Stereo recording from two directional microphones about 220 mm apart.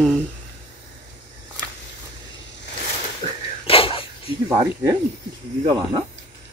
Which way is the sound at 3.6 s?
25° left (ahead or behind).